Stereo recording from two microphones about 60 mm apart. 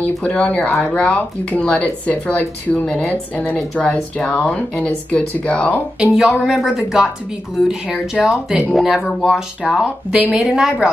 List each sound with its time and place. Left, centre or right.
0.0 s speech: left
6.1 s speech: centre